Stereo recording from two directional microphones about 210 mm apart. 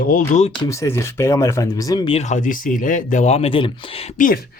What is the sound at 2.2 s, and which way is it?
Speech, 35° left (ahead or behind).